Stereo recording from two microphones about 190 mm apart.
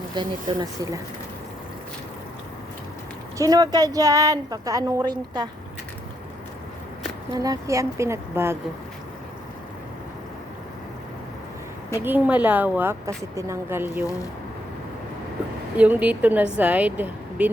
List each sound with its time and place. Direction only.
0.1 s a woman's voice: 20° right (ahead or behind)
3.3 s a woman's voice: 20° right (ahead or behind)
7.3 s speech: 20° right (ahead or behind)
11.9 s speech: 10° right (ahead or behind)
15.8 s speech: 10° right (ahead or behind)